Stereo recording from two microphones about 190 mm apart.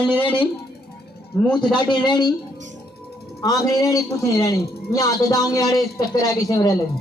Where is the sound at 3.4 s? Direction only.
20° left (ahead or behind).